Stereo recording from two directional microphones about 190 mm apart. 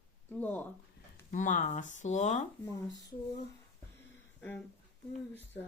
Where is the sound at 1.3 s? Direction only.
40° left (ahead or behind).